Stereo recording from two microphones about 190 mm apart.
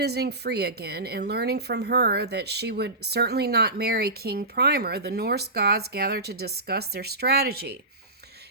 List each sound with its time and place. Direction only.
0.0 s a woman's voice: 60° right (ahead or behind)